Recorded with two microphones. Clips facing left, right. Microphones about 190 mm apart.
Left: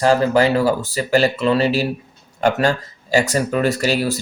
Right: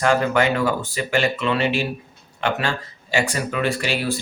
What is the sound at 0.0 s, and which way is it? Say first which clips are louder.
Speech: left 4 dB; 35° left (ahead or behind).